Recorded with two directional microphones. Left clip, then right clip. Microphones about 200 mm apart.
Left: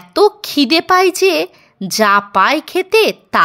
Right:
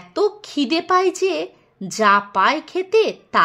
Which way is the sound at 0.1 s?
25° left (ahead or behind).